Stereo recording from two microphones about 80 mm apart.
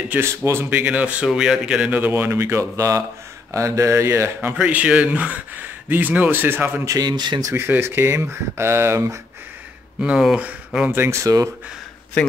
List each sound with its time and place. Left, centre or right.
0.2 s speech: right
0.8 s speech: centre
1.9 s speech: right
4.6 s speech: centre
7.0 s speech: right
7.5 s speech: right
10.0 s speech: centre
10.9 s speech: right
11.2 s speech: right